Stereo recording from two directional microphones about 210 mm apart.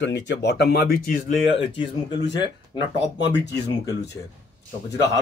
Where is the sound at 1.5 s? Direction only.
25° left (ahead or behind).